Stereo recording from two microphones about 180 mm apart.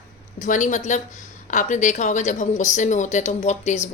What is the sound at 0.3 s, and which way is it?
A woman's voice, 45° left (ahead or behind).